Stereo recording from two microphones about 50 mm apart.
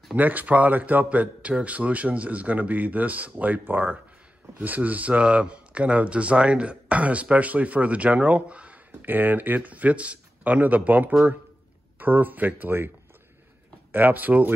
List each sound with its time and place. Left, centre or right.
0.1 s speech: right
9.0 s speech: right
13.9 s speech: right